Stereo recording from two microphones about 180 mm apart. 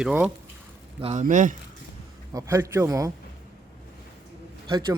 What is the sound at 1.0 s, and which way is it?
Speech, 40° right (ahead or behind).